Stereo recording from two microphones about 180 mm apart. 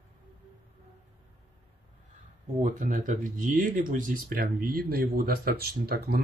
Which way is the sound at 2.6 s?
45° right (ahead or behind).